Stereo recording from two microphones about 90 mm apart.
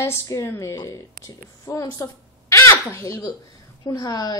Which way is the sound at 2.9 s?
35° left (ahead or behind).